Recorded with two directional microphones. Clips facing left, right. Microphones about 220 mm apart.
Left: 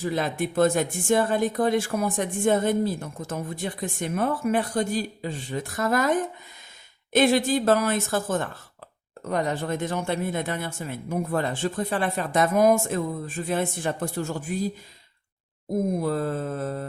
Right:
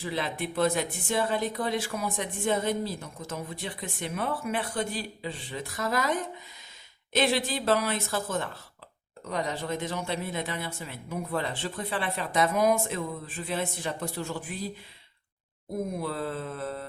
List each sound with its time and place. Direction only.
0.0 s speech: 45° left (ahead or behind)
16.0 s speech: 45° left (ahead or behind)